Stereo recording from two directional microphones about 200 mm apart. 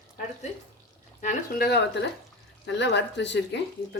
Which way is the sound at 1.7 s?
55° left (ahead or behind).